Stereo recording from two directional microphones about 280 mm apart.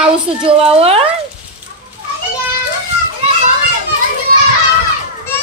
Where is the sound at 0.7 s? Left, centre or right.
Right.